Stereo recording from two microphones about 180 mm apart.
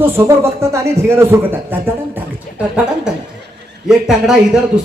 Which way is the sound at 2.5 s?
50° left (ahead or behind).